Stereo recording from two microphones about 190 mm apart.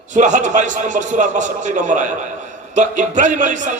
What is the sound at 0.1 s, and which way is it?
A man's voice, 40° right (ahead or behind).